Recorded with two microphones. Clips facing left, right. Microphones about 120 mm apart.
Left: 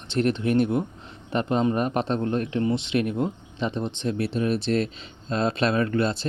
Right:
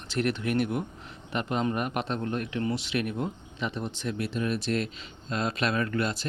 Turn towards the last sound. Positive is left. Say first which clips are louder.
# left 5 dB
turn(degrees=30)  # may be behind; listen again after turning